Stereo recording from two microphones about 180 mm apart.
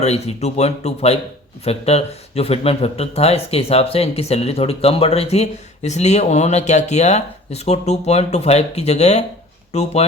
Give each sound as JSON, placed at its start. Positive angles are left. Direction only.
{"t": 0.0, "sound": "speech", "side_deg": 35}